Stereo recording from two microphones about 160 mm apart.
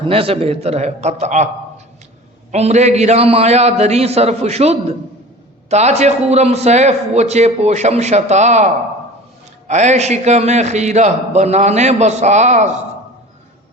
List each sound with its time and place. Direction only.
0.0 s a man's voice: 35° right (ahead or behind)
2.5 s a man's voice: 45° right (ahead or behind)